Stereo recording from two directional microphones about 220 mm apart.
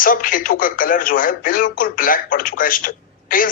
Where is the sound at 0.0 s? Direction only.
40° left (ahead or behind).